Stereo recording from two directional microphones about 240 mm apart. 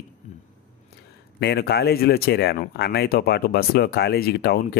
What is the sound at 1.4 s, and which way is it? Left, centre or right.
Speech, left.